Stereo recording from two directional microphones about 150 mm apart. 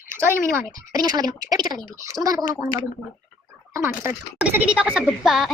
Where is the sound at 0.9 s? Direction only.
25° right (ahead or behind).